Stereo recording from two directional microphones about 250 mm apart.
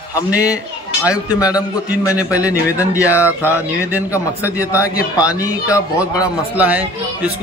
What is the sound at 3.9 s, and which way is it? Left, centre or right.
Speech, centre.